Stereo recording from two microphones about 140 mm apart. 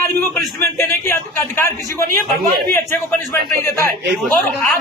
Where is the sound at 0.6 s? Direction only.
15° left (ahead or behind).